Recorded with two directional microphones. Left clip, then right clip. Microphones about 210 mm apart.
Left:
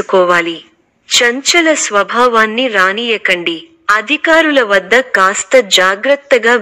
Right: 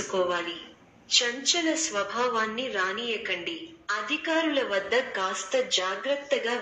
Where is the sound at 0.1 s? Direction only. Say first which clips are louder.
Left 18 dB; 45° left (ahead or behind).